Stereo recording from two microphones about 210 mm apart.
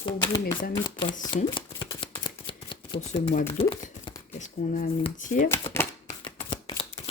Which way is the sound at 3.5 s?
25° left (ahead or behind).